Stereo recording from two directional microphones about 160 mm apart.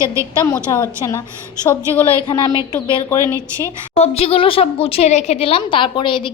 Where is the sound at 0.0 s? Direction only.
20° right (ahead or behind).